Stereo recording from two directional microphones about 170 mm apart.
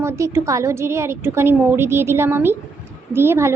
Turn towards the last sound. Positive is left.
turn(degrees=-15)  # may be behind; listen again after turning